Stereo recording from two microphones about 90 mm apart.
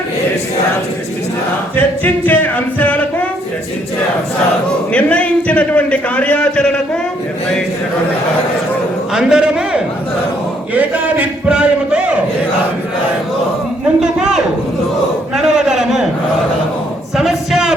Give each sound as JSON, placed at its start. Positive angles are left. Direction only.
{"t": 1.7, "sound": "a capella", "side_deg": 20}
{"t": 4.9, "sound": "a man's voice", "side_deg": 15}
{"t": 9.1, "sound": "a man's voice", "side_deg": -10}
{"t": 14.0, "sound": "a man's voice", "side_deg": -5}
{"t": 15.4, "sound": "a sound", "side_deg": -5}
{"t": 17.2, "sound": "a sound", "side_deg": -5}